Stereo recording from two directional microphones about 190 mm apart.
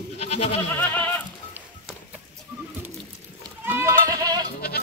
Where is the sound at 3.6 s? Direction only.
10° right (ahead or behind).